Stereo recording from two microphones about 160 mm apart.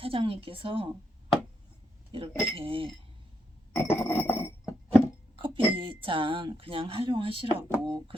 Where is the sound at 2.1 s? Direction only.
35° right (ahead or behind).